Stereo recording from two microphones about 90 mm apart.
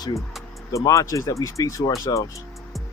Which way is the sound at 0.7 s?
35° left (ahead or behind).